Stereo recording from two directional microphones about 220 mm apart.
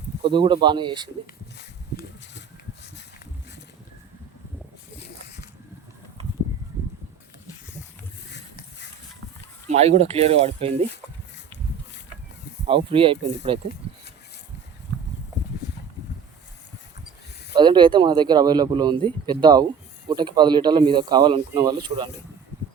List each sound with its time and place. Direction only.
0.3 s speech: 20° right (ahead or behind)
1.5 s a sound: 50° left (ahead or behind)
9.6 s speech: 30° right (ahead or behind)
12.6 s speech: 25° right (ahead or behind)
17.5 s speech: 20° right (ahead or behind)